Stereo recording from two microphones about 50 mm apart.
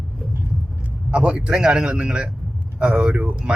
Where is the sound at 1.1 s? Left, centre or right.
Right.